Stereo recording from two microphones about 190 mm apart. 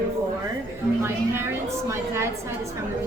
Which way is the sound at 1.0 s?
15° right (ahead or behind).